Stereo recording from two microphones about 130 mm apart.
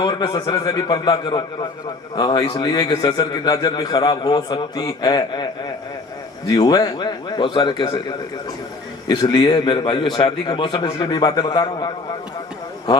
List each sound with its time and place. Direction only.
0.0 s a man's voice: 35° left (ahead or behind)